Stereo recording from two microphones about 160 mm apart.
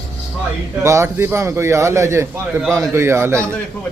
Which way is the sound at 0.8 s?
15° right (ahead or behind).